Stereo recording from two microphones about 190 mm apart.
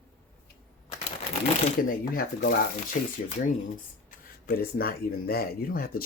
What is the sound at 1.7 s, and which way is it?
Speech, 50° left (ahead or behind).